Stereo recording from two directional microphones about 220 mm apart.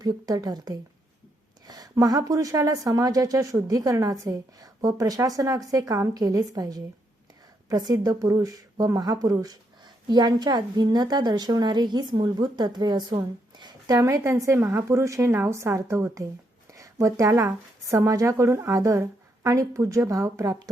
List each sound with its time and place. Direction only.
0.0 s speech: 15° right (ahead or behind)